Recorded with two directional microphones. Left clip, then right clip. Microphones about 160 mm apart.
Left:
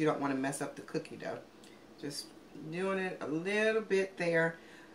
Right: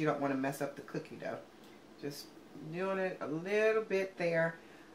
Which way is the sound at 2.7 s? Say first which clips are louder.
Even; 20° right (ahead or behind).